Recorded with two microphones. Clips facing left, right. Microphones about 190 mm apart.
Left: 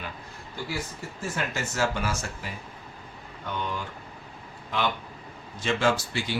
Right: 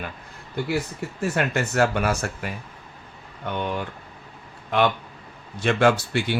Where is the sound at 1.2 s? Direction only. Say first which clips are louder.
Right 8 dB; 65° right (ahead or behind).